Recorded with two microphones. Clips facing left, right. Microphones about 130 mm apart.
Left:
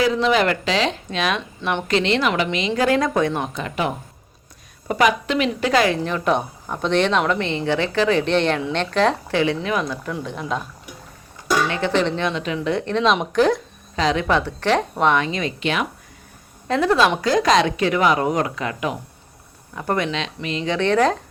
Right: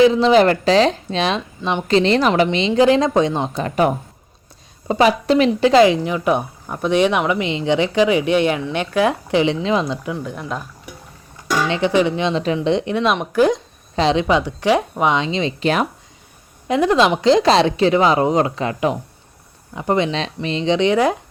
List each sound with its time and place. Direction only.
0.0 s speech: 30° right (ahead or behind)
3.5 s speech: 40° right (ahead or behind)
4.9 s speech: 30° right (ahead or behind)
10.1 s speech: 5° right (ahead or behind)
11.7 s speech: 15° right (ahead or behind)
12.3 s speech: 35° right (ahead or behind)
12.5 s speech: 20° right (ahead or behind)
12.9 s speech: 10° right (ahead or behind)
13.9 s speech: 30° right (ahead or behind)
15.6 s speech: 40° right (ahead or behind)
16.6 s speech: 15° right (ahead or behind); by 18.9 s 30° right (ahead or behind)
19.7 s speech: 20° right (ahead or behind)
20.1 s speech: 35° right (ahead or behind); by 21.2 s 10° right (ahead or behind)